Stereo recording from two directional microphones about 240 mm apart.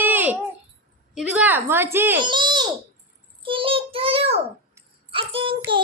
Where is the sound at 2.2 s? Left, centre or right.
Centre.